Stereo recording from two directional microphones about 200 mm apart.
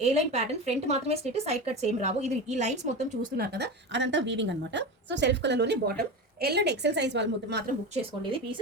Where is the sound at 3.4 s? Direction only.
55° right (ahead or behind).